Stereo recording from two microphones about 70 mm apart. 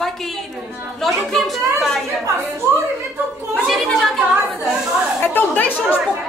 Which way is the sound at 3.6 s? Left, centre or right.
Centre.